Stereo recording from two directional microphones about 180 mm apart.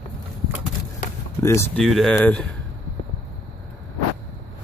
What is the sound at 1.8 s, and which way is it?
Speech, centre (ahead or behind).